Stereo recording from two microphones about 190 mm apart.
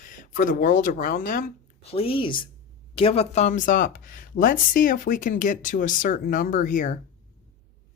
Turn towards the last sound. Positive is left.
turn(degrees=45)  # may be behind; listen again after turning